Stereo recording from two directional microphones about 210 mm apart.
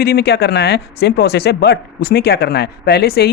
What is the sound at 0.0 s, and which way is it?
Speech, 50° left (ahead or behind).